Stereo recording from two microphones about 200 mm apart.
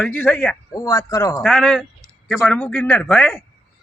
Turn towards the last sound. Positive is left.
turn(degrees=5)  # may be behind; listen again after turning